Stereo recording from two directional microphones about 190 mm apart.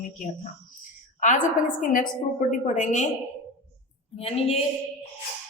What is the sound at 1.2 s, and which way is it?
A woman's voice, 40° left (ahead or behind).